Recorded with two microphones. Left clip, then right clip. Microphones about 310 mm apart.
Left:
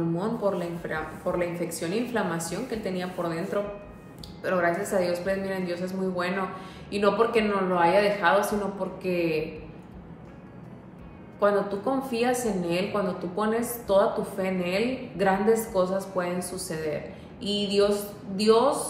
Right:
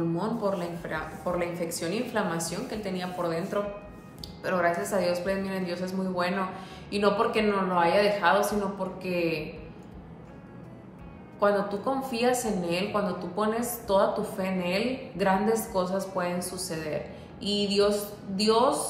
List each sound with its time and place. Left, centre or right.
0.1 s a woman's voice: centre
11.3 s a woman's voice: centre